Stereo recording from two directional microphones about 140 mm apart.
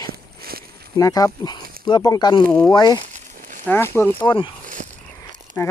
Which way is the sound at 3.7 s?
15° left (ahead or behind).